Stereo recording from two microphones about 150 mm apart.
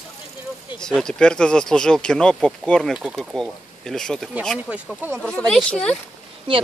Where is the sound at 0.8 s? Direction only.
5° left (ahead or behind).